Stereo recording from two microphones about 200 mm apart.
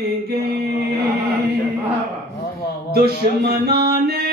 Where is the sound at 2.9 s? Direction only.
50° right (ahead or behind).